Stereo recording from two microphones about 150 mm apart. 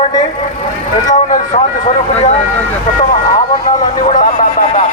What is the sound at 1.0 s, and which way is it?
Vehicle, 60° left (ahead or behind).